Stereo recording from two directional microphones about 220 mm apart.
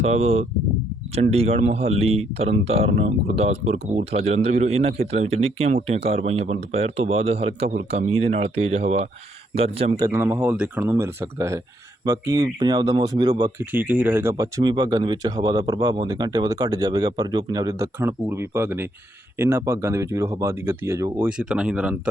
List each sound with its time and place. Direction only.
0.0 s speech: 30° right (ahead or behind)
10.1 s speech: 10° right (ahead or behind)
13.7 s speech: 10° right (ahead or behind)